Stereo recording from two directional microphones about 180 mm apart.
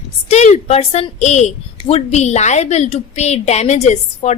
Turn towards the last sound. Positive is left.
turn(degrees=40)  # may be behind; listen again after turning